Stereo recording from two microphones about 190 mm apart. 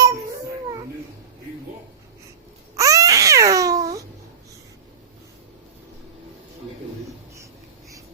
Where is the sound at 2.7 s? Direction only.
15° right (ahead or behind).